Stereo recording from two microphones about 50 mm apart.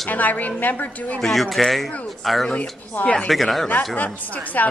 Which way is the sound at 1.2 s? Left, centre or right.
Centre.